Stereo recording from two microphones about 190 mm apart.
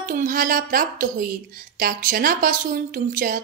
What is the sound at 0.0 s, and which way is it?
A woman's voice, 45° right (ahead or behind).